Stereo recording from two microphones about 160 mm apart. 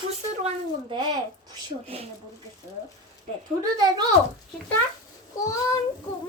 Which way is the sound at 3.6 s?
25° right (ahead or behind).